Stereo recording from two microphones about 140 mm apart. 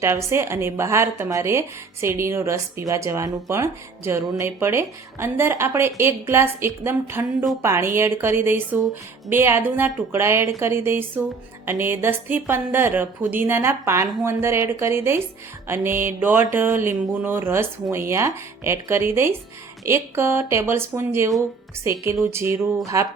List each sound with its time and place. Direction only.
0.0 s a woman's voice: 20° right (ahead or behind)